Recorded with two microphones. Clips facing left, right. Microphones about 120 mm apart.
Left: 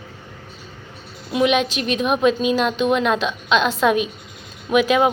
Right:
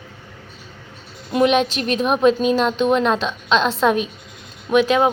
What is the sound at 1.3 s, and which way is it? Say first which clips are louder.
Speech: right 2 dB; 40° right (ahead or behind).